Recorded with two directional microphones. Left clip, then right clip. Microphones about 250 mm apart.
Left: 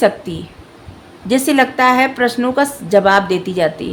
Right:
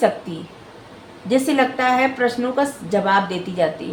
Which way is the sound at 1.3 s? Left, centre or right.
Left.